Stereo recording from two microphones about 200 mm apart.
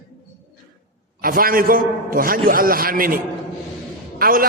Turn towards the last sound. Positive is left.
turn(degrees=-45)  # may be behind; listen again after turning